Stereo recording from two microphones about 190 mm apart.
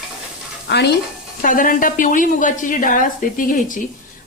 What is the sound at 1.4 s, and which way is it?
Speech, 45° left (ahead or behind).